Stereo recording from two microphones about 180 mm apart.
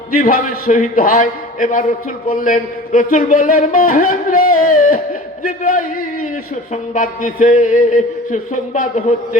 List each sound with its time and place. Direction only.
0.1 s a man's voice: 50° left (ahead or behind)
6.9 s a man's voice: 45° left (ahead or behind)